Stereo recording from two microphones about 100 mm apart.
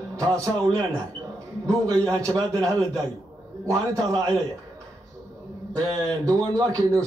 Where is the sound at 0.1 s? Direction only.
35° right (ahead or behind).